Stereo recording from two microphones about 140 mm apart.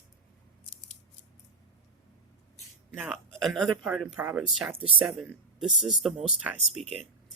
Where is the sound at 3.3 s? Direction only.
Centre (ahead or behind).